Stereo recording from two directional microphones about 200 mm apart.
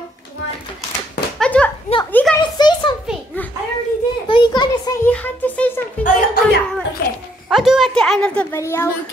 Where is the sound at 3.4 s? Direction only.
10° left (ahead or behind).